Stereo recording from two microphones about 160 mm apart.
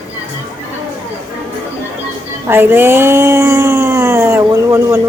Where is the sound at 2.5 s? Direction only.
15° right (ahead or behind).